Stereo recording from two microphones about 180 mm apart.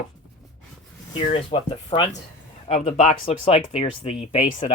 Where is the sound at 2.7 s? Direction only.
40° left (ahead or behind).